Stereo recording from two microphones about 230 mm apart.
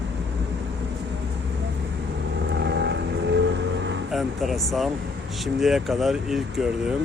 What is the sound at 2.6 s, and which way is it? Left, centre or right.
Vehicle, right.